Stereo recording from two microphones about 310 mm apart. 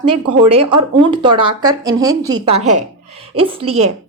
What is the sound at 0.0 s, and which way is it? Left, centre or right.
A woman's voice, centre.